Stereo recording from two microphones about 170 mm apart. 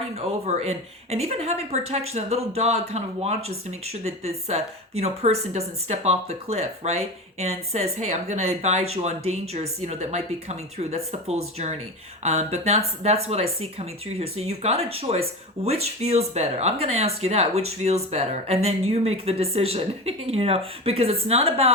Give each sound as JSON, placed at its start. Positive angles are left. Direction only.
{"t": 0.2, "sound": "speech", "side_deg": -40}